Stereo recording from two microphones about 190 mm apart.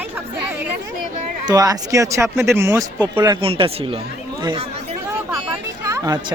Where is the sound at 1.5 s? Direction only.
20° right (ahead or behind).